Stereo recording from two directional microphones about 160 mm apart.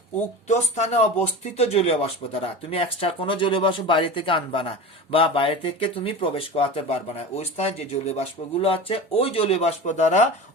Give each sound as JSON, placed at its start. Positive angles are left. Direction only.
{"t": 0.4, "sound": "speech", "side_deg": 45}